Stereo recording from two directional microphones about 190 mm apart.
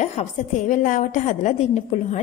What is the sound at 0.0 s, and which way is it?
A woman's voice, 35° left (ahead or behind).